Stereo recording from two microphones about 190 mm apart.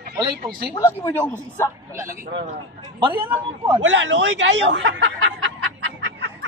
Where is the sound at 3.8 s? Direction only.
80° right.